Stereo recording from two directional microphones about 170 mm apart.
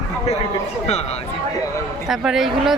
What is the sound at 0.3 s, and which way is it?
Speech, 40° left (ahead or behind).